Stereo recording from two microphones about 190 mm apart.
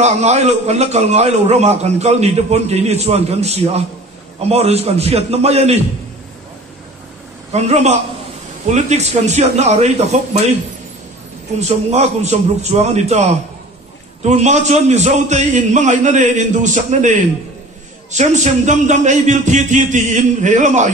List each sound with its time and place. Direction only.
0.0 s a man's voice: 35° right (ahead or behind)
7.5 s a man's voice: 35° right (ahead or behind)
11.6 s a man's voice: 35° right (ahead or behind)